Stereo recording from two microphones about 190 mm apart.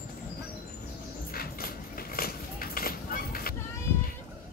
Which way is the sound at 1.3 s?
50° left (ahead or behind).